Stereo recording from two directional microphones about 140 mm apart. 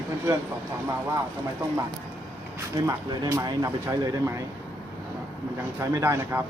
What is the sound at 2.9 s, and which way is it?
Speech, 25° right (ahead or behind).